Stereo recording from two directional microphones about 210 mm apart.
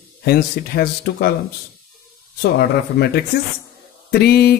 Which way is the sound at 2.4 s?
50° left (ahead or behind).